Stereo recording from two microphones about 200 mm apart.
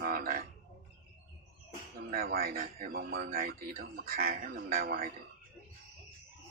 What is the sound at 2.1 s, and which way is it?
Speech, 45° right (ahead or behind).